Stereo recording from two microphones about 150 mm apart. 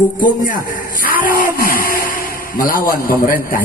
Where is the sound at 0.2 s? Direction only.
65° left (ahead or behind).